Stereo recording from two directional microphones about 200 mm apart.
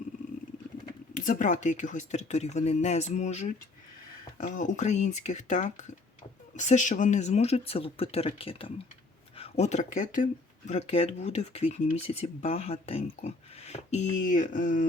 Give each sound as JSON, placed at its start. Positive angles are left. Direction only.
{"t": 1.1, "sound": "speech", "side_deg": 40}